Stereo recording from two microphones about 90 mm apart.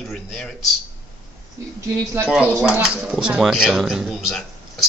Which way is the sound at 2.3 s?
15° right (ahead or behind).